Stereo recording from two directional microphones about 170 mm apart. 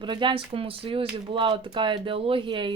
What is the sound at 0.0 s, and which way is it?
Speech, 30° right (ahead or behind).